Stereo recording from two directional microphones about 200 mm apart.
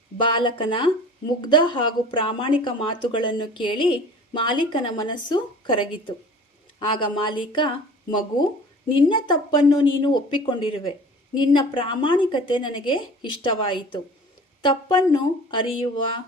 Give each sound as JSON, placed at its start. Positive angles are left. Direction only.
{"t": 0.2, "sound": "a woman's voice", "side_deg": 25}
{"t": 8.9, "sound": "a woman's voice", "side_deg": 25}